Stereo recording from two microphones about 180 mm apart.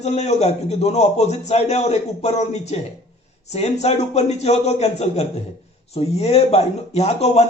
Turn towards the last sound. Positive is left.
turn(degrees=35)  # may be behind; listen again after turning